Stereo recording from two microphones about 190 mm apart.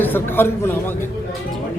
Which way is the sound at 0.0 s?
10° left (ahead or behind).